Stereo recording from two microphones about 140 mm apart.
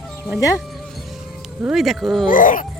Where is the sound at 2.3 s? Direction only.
70° left (ahead or behind).